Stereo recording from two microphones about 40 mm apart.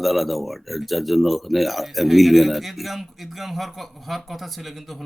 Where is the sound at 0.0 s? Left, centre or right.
Centre.